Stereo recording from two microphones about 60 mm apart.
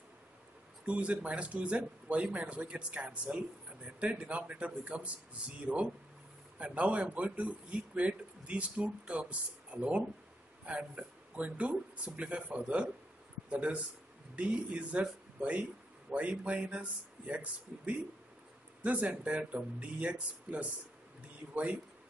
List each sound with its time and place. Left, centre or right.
0.8 s a man's voice: right
6.6 s a man's voice: right